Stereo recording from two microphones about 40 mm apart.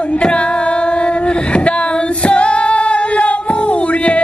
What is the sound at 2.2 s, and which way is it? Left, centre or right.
Female singing, left.